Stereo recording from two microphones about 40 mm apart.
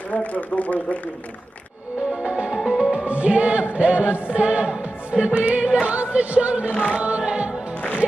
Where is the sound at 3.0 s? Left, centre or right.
Right.